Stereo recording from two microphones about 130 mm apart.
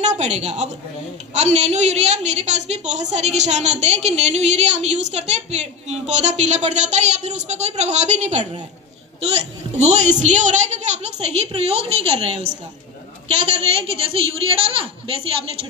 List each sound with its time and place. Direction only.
0.0 s a woman's voice: 60° right (ahead or behind); by 15.1 s 45° right (ahead or behind)